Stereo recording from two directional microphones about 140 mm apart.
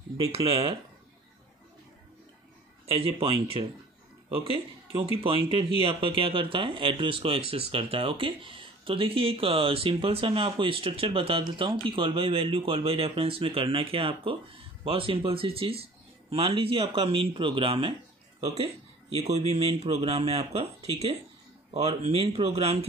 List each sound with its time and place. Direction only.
0.5 s speech: 40° right (ahead or behind)
2.9 s speech: 40° right (ahead or behind)